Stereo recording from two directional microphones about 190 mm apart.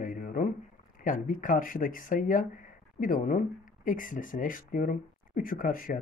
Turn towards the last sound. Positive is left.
turn(degrees=45)  # may be behind; listen again after turning